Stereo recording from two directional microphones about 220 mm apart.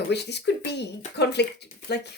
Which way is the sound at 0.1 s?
50° left (ahead or behind).